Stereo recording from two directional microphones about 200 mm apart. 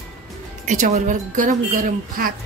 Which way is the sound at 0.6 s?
35° right (ahead or behind).